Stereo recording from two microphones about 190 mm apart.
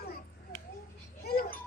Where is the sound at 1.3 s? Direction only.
50° left (ahead or behind).